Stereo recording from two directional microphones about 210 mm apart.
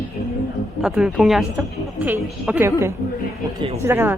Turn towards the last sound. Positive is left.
turn(degrees=-10)  # may be behind; listen again after turning